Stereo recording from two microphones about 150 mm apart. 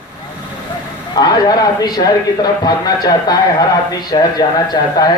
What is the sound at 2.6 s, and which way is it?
A man's voice, 25° left (ahead or behind).